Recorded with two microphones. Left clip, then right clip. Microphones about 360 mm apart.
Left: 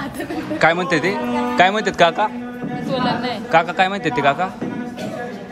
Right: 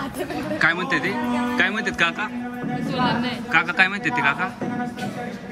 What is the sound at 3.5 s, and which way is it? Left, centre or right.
Speech, centre.